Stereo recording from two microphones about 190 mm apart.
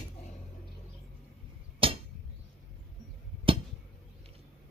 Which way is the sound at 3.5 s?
30° right (ahead or behind).